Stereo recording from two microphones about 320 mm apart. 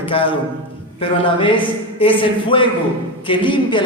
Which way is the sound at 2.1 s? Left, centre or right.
Centre.